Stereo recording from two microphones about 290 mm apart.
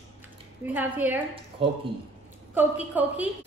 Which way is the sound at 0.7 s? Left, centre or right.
Centre.